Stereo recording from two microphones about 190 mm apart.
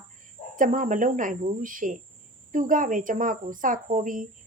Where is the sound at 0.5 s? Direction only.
45° right (ahead or behind).